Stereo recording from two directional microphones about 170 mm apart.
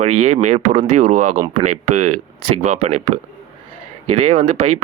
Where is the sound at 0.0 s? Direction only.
45° right (ahead or behind).